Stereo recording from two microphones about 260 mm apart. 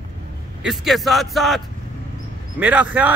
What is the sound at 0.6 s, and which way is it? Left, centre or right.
A man's voice, centre.